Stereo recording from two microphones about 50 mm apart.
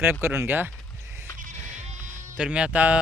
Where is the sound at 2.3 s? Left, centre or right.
Right.